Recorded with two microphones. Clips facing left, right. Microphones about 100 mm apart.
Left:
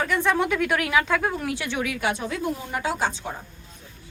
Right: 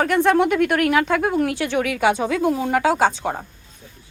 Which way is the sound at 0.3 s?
65° right (ahead or behind).